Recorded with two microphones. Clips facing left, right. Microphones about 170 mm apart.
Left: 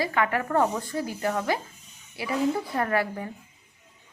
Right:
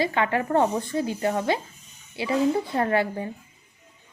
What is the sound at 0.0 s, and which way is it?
A woman's voice, 25° right (ahead or behind).